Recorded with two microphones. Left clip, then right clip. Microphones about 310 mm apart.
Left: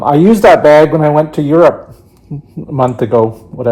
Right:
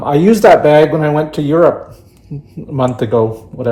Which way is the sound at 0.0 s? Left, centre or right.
Centre.